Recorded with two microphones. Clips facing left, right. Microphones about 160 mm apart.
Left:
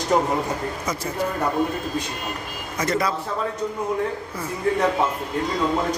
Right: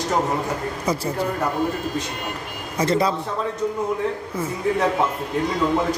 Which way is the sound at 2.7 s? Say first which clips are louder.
Right 3 dB; 30° right (ahead or behind).